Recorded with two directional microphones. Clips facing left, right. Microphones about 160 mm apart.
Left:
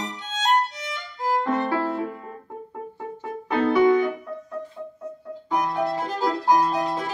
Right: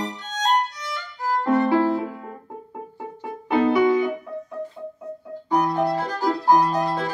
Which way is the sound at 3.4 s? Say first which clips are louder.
Even; 15° right (ahead or behind).